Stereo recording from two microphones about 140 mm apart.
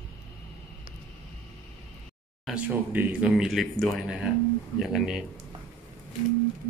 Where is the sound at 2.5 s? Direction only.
10° right (ahead or behind).